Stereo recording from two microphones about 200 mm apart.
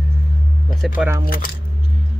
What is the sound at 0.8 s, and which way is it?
Speech, centre (ahead or behind).